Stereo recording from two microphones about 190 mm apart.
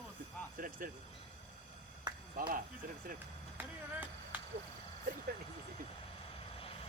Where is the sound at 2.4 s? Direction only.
45° right (ahead or behind).